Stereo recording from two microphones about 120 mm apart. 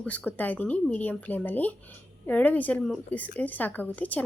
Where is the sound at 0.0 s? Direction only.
10° left (ahead or behind).